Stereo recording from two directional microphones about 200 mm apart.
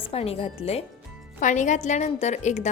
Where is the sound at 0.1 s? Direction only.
30° left (ahead or behind).